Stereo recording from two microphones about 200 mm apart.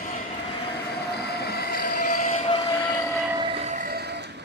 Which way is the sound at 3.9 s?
55° right (ahead or behind).